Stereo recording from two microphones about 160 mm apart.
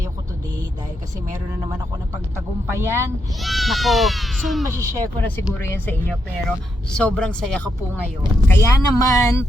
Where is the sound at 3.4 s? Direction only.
Centre (ahead or behind).